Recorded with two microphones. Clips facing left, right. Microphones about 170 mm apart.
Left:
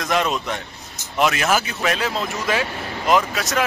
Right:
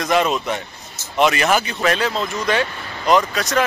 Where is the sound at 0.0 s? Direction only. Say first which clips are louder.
Right 3 dB; centre (ahead or behind).